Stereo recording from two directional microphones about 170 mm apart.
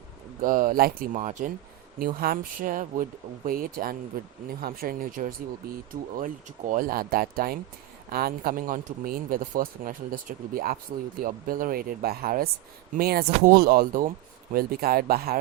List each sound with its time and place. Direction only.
0.4 s speech: 55° right (ahead or behind)
2.0 s speech: 60° right (ahead or behind)